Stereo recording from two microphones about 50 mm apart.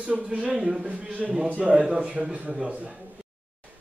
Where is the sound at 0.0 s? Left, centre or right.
Right.